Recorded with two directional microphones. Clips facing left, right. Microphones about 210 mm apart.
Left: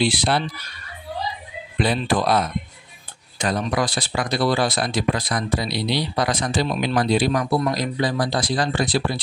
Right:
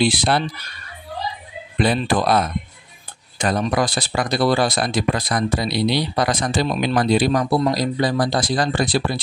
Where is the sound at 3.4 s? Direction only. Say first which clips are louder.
Right 3 dB; 45° right (ahead or behind).